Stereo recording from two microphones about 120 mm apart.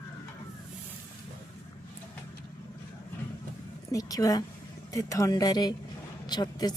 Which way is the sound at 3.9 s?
30° left (ahead or behind).